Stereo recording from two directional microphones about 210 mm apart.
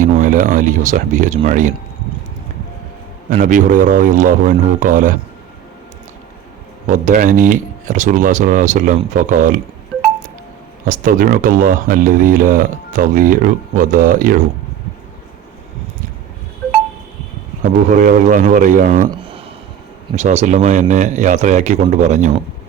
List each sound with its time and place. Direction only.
0.0 s speech: 40° right (ahead or behind)
3.2 s speech: 40° right (ahead or behind)
6.8 s speech: 35° right (ahead or behind)
10.8 s speech: 40° right (ahead or behind)
17.6 s speech: 40° right (ahead or behind)
20.1 s speech: 35° right (ahead or behind)